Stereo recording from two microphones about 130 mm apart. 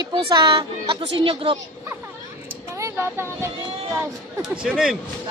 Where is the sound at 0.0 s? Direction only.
35° right (ahead or behind).